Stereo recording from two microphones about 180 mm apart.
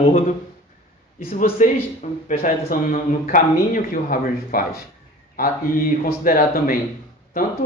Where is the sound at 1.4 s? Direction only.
45° left (ahead or behind).